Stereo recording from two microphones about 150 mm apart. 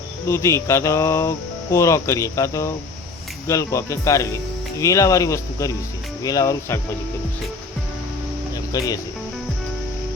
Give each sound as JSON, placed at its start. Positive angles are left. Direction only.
{"t": 0.3, "sound": "speech", "side_deg": 20}